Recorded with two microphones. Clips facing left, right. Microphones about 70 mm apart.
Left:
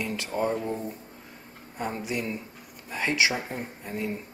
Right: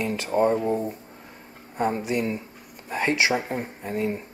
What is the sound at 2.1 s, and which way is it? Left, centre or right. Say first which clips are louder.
Speech: right 5 dB; centre.